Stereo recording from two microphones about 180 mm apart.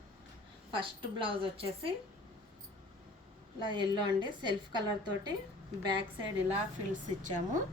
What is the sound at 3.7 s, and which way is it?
A woman's voice, 25° right (ahead or behind).